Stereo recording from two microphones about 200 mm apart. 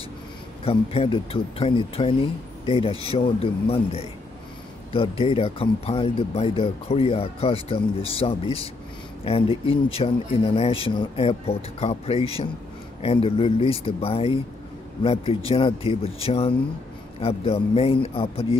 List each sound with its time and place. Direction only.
0.7 s speech: 30° left (ahead or behind)